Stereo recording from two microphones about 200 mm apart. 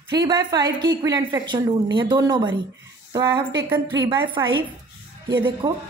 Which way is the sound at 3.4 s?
10° right (ahead or behind).